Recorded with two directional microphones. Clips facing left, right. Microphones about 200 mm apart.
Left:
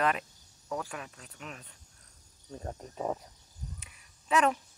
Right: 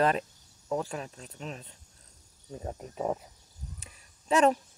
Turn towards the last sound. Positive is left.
turn(degrees=-30)  # may be behind; listen again after turning